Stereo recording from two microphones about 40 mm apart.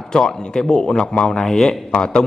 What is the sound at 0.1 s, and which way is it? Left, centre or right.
A man's voice, centre.